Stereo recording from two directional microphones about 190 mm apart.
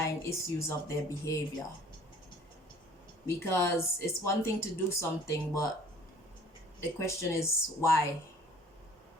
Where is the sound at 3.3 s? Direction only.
15° left (ahead or behind).